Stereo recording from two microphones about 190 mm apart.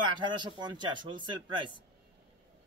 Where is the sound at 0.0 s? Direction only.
25° right (ahead or behind).